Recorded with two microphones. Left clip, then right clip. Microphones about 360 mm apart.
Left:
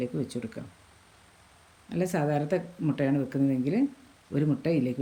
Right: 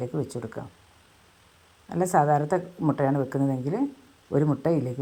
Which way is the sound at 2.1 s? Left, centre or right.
Right.